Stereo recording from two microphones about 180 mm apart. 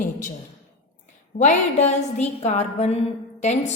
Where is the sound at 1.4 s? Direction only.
40° left (ahead or behind).